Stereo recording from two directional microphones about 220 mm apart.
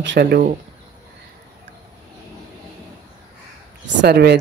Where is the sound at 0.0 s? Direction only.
50° right (ahead or behind).